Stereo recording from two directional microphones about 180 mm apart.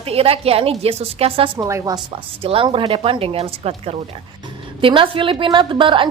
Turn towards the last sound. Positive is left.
turn(degrees=-25)  # may be behind; listen again after turning